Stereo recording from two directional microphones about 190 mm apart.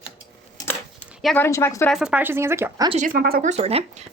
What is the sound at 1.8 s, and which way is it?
Speech, 5° right (ahead or behind).